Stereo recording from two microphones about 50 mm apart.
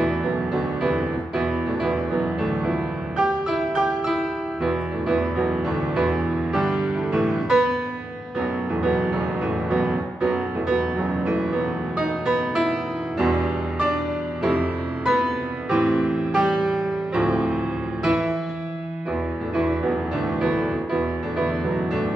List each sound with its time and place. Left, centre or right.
0.0 s music: centre
8.8 s music: centre
15.0 s music: centre
15.8 s music: right
16.1 s music: centre
19.5 s music: centre